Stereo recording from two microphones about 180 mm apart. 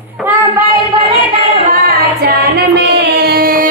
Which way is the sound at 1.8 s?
60° right (ahead or behind).